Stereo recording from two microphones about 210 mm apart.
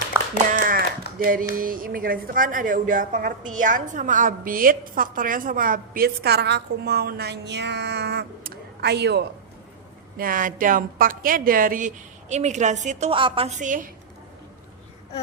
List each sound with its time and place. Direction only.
0.5 s a sound: 45° right (ahead or behind)
1.5 s speech: 40° right (ahead or behind)
10.2 s a woman's voice: 40° right (ahead or behind)